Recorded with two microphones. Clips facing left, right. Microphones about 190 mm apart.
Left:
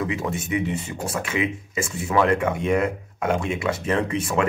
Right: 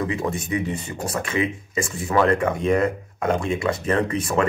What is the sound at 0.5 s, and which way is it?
Speech, 15° left (ahead or behind).